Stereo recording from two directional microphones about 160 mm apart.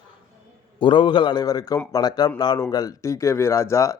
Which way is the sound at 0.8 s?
30° left (ahead or behind).